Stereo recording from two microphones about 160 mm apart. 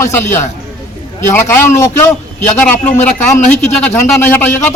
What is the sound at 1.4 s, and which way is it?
Speech, 15° left (ahead or behind).